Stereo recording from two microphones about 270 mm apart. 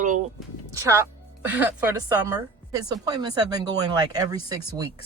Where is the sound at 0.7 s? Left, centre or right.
Centre.